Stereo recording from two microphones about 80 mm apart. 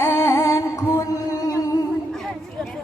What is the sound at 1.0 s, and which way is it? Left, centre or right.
Mantra, left.